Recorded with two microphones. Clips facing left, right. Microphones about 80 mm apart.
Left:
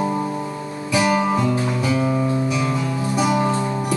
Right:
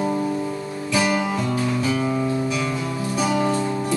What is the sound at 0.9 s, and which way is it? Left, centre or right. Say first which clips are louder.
Music: left 3 dB; left.